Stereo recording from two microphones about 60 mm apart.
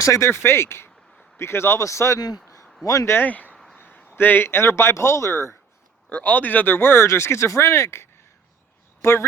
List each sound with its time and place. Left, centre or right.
0.0 s speech: left
2.1 s speech: left
2.8 s speech: left
3.2 s speech: left
6.1 s speech: left